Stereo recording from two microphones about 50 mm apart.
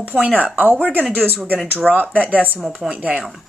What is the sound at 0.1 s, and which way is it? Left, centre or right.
Speech, right.